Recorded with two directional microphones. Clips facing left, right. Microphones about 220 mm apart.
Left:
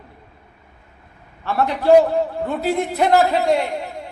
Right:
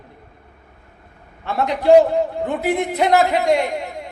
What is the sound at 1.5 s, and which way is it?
A man's voice, 15° right (ahead or behind).